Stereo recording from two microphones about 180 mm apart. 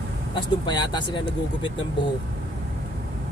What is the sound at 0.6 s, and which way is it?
Speech, 25° left (ahead or behind).